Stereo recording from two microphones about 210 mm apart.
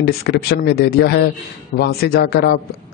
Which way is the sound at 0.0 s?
50° left (ahead or behind).